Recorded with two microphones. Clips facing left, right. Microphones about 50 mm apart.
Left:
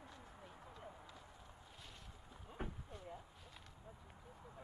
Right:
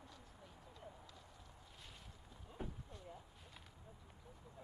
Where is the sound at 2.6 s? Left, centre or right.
Left.